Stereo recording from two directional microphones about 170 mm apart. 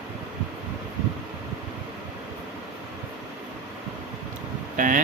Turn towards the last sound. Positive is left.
turn(degrees=-45)  # may be behind; listen again after turning